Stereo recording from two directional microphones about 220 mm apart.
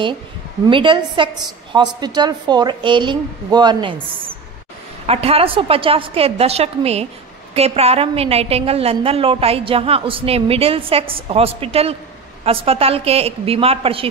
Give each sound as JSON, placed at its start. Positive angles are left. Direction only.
{"t": 0.7, "sound": "a woman's voice", "side_deg": -20}